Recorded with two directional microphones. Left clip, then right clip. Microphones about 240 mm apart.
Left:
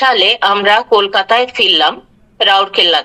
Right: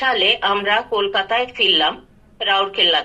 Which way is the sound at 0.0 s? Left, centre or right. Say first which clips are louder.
Left 7 dB; left.